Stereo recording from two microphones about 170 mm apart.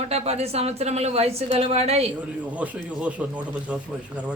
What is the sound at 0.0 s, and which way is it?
A woman's voice, 40° right (ahead or behind).